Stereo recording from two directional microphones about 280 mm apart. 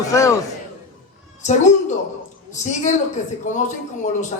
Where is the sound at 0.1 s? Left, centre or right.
Centre.